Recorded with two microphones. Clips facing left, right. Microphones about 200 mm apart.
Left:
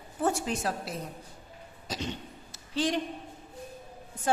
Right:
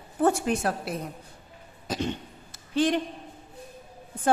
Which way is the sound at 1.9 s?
55° right (ahead or behind).